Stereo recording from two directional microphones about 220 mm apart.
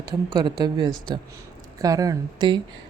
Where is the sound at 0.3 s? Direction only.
20° right (ahead or behind).